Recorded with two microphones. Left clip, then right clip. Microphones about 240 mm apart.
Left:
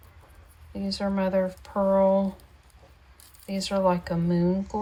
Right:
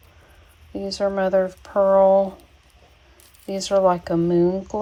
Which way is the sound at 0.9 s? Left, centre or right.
Right.